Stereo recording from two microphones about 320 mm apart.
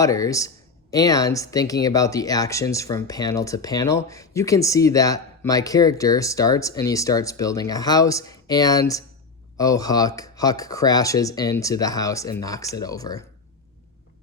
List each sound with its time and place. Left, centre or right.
0.0 s speech: centre